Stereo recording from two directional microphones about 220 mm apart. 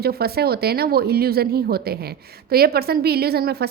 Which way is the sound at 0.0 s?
45° right (ahead or behind).